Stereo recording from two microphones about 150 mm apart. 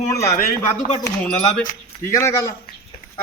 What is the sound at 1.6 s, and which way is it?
Speech, 20° left (ahead or behind).